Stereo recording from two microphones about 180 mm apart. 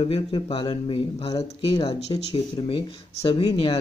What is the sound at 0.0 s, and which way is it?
Speech, 30° left (ahead or behind).